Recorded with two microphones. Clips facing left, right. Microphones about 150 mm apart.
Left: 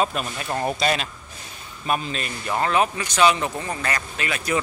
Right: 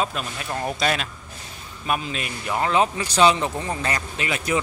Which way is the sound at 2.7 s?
25° right (ahead or behind).